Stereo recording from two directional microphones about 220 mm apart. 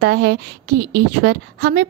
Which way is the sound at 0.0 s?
50° right (ahead or behind).